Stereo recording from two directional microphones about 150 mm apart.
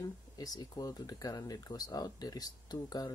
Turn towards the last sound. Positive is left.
turn(degrees=25)  # may be behind; listen again after turning